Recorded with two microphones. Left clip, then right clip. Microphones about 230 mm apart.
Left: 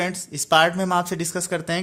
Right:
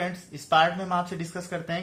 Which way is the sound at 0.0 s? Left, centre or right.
Left.